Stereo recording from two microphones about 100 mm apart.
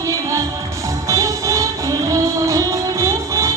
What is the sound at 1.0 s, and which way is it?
Music, 30° right (ahead or behind).